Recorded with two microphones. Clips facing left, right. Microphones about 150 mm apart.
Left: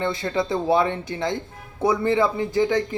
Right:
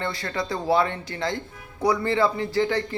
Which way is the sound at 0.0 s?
20° left (ahead or behind).